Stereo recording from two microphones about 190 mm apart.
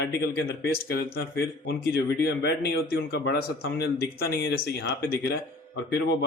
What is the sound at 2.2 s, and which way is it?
Speech, 55° left (ahead or behind).